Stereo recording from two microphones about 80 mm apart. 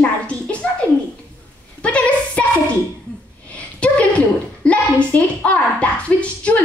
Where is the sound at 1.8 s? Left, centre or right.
Centre.